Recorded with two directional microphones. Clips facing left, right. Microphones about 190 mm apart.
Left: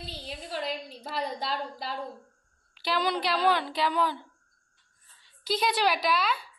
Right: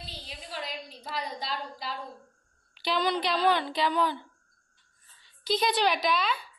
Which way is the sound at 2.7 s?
5° left (ahead or behind).